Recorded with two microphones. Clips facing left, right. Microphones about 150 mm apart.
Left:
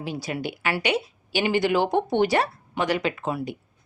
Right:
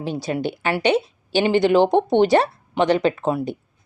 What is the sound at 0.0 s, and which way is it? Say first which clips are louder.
Speech: right 6 dB; 25° right (ahead or behind).